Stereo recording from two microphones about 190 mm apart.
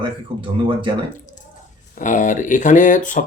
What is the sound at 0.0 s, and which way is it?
Speech, 25° right (ahead or behind).